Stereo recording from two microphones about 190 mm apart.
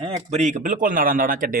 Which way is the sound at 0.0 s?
35° right (ahead or behind).